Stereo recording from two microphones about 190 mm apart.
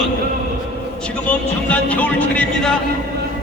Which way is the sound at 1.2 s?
5° left (ahead or behind).